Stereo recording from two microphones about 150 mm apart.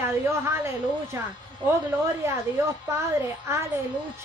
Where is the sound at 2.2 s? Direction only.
15° right (ahead or behind).